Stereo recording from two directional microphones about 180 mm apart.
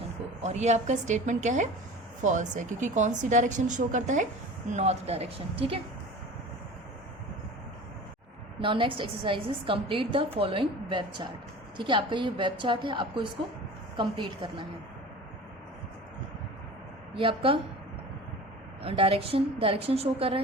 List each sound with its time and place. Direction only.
0.4 s a woman's voice: 40° right (ahead or behind)
8.6 s a woman's voice: 30° right (ahead or behind)
17.2 s a woman's voice: 30° right (ahead or behind)
18.9 s a woman's voice: 30° right (ahead or behind)